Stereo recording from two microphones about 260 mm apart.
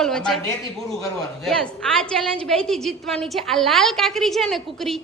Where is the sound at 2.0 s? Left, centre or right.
Centre.